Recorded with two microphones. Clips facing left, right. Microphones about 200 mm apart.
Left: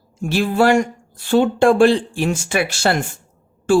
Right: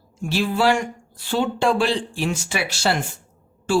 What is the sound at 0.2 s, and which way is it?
A woman's voice, 50° left (ahead or behind).